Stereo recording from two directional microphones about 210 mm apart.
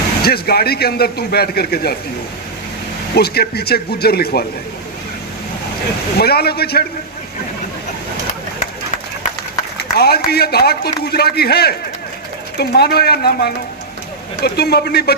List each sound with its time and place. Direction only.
0.2 s a man's voice: 45° left (ahead or behind)
3.2 s a man's voice: 50° left (ahead or behind)
6.1 s a man's voice: 50° left (ahead or behind)
9.7 s a sound: 50° left (ahead or behind)
10.2 s a man's voice: 50° left (ahead or behind)